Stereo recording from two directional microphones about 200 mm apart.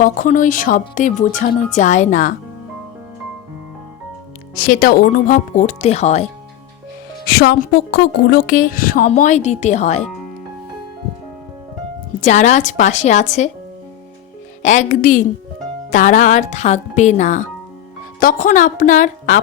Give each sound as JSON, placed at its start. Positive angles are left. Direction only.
{"t": 0.0, "sound": "speech", "side_deg": 40}
{"t": 4.5, "sound": "speech", "side_deg": 45}
{"t": 7.3, "sound": "a woman's voice", "side_deg": 50}
{"t": 12.2, "sound": "speech", "side_deg": 35}
{"t": 14.6, "sound": "speech", "side_deg": 35}